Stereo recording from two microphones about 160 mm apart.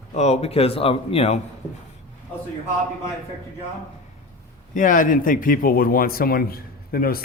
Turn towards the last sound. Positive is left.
turn(degrees=70)  # may be behind; listen again after turning